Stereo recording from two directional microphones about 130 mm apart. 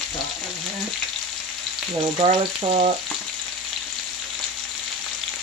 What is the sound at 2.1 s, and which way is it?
Frying, 60° right (ahead or behind).